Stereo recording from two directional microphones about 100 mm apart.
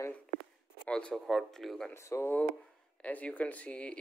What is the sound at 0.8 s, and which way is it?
Speech, 10° left (ahead or behind).